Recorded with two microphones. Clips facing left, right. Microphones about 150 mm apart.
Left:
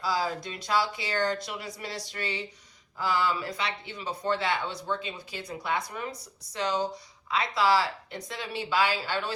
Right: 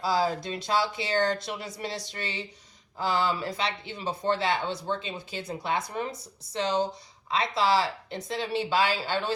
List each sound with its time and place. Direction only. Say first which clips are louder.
0.0 s speech: right 3 dB; 25° right (ahead or behind)